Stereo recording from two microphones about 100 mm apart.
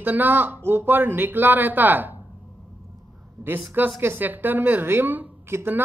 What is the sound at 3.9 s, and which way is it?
Speech, 20° right (ahead or behind).